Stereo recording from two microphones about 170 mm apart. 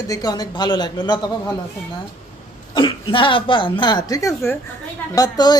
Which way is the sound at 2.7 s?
30° left (ahead or behind).